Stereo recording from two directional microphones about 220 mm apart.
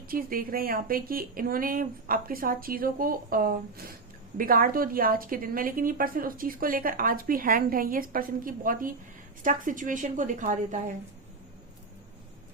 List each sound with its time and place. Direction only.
0.1 s speech: 40° right (ahead or behind)